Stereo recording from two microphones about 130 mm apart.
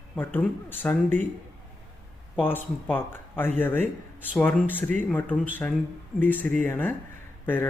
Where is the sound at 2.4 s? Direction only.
15° left (ahead or behind).